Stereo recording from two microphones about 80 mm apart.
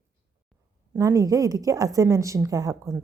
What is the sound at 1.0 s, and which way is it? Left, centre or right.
A woman's voice, right.